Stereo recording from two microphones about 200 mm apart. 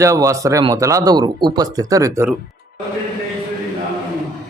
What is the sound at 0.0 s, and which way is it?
Speech, 15° right (ahead or behind).